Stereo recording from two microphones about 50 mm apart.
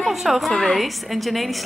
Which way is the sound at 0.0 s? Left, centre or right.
Centre.